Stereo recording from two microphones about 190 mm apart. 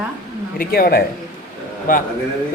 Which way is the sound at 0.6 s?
50° left (ahead or behind).